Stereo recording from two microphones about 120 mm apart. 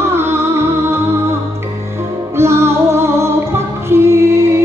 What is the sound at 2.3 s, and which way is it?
Music, 20° right (ahead or behind).